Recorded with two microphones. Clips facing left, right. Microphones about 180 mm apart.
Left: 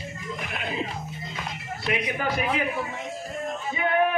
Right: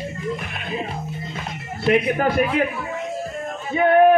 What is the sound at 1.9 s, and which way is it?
Speech, 55° right (ahead or behind).